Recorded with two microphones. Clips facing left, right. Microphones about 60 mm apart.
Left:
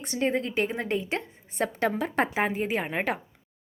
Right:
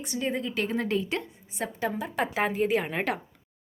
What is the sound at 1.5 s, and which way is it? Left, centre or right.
Speech, left.